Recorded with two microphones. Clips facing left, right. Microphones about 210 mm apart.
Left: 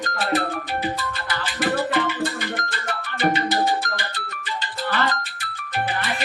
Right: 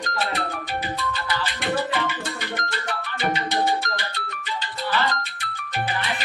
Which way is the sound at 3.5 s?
Centre (ahead or behind).